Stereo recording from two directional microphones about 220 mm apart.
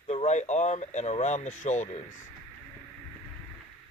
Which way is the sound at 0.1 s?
30° left (ahead or behind).